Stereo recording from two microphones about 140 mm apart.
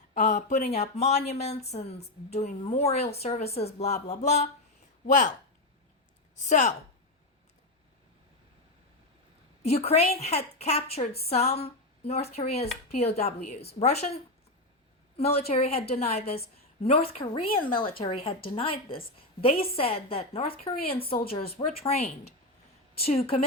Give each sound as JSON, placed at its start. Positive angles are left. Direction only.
{"t": 0.1, "sound": "speech", "side_deg": 60}
{"t": 5.0, "sound": "speech", "side_deg": 65}
{"t": 6.3, "sound": "a woman's voice", "side_deg": 60}
{"t": 9.6, "sound": "speech", "side_deg": 50}
{"t": 15.2, "sound": "speech", "side_deg": 50}